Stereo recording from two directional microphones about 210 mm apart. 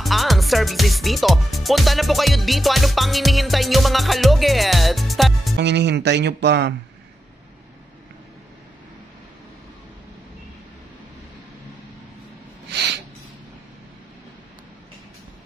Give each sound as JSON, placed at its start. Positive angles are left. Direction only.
{"t": 0.0, "sound": "speech", "side_deg": 0}
{"t": 5.6, "sound": "speech", "side_deg": -55}
{"t": 12.6, "sound": "a sound", "side_deg": -55}